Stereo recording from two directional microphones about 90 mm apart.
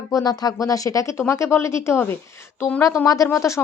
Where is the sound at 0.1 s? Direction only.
45° left (ahead or behind).